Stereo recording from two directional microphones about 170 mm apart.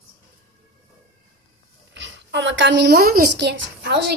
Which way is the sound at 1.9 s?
90° right.